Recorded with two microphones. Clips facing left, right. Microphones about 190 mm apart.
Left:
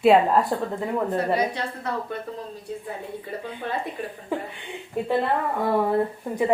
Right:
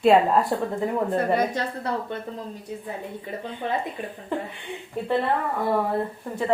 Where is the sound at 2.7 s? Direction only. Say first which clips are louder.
Left 1 dB; 15° right (ahead or behind).